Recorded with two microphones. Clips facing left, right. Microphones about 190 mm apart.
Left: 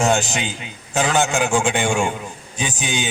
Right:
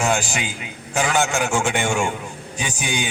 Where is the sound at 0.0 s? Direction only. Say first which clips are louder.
Left 3 dB; 25° left (ahead or behind).